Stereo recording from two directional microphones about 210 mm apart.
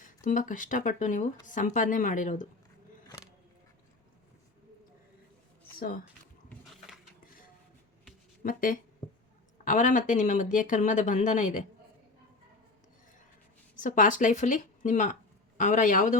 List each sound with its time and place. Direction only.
0.0 s speech: 40° left (ahead or behind)
6.5 s a sound: centre (ahead or behind)
8.4 s speech: 40° left (ahead or behind)
13.7 s speech: 35° left (ahead or behind)